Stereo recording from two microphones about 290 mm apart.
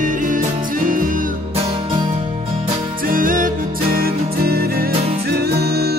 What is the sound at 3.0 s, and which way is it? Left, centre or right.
Music, right.